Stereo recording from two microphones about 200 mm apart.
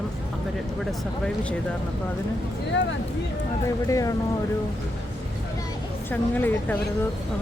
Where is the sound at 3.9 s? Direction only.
15° left (ahead or behind).